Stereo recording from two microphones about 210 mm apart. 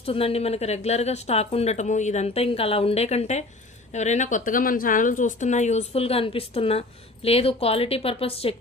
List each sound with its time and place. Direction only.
0.0 s speech: 30° left (ahead or behind)